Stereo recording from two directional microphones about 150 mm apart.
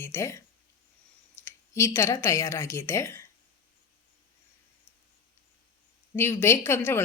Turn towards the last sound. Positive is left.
turn(degrees=15)  # may be behind; listen again after turning